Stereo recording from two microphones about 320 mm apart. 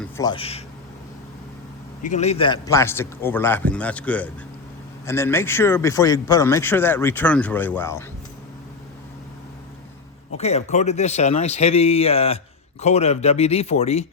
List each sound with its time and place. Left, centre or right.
0.0 s speech: centre
2.0 s speech: left
10.3 s speech: centre